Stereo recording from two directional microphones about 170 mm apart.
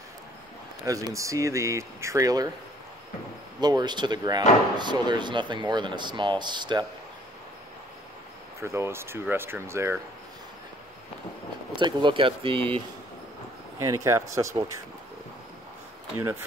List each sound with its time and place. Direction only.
0.8 s speech: 20° right (ahead or behind)
3.6 s speech: 25° right (ahead or behind)
8.5 s speech: 15° right (ahead or behind)
11.7 s speech: 30° right (ahead or behind)
13.7 s speech: 20° right (ahead or behind)
16.2 s speech: 15° right (ahead or behind)